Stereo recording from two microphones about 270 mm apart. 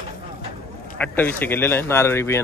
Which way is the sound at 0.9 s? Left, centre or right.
Centre.